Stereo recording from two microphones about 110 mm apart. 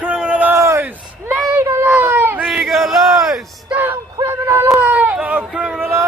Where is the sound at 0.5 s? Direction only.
30° right (ahead or behind).